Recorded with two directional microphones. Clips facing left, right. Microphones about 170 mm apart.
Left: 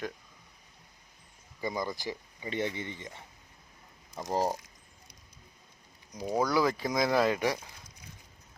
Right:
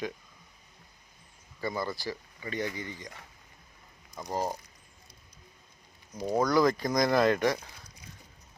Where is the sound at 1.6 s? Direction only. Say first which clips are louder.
Right 1 dB; 15° left (ahead or behind).